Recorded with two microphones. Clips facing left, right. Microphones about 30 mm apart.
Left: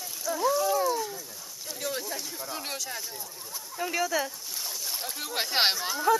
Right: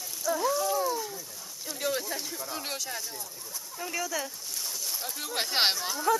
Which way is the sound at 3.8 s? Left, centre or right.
Centre.